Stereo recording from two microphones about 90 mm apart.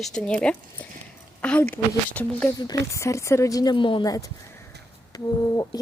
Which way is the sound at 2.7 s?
35° left (ahead or behind).